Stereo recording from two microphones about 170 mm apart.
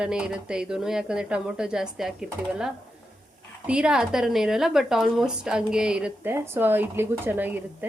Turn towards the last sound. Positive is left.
turn(degrees=-10)  # may be behind; listen again after turning